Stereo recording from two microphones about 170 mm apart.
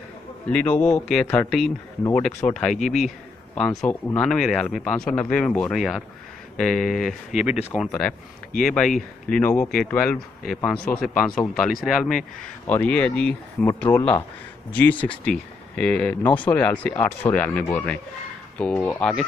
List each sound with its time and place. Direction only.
0.5 s speech: 10° left (ahead or behind)
10.8 s speech: 65° left (ahead or behind)
11.1 s speech: 5° left (ahead or behind)